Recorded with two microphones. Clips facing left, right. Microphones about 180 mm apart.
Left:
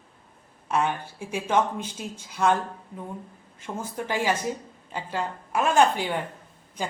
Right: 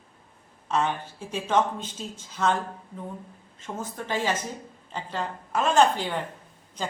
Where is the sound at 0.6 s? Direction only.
10° left (ahead or behind).